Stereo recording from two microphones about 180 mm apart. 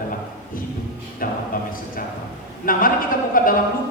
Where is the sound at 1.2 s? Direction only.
50° left (ahead or behind).